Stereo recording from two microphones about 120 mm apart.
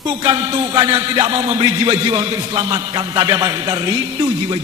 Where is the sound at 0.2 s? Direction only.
30° right (ahead or behind).